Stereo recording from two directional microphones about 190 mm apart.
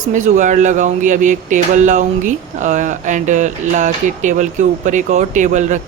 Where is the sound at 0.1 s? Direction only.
40° right (ahead or behind).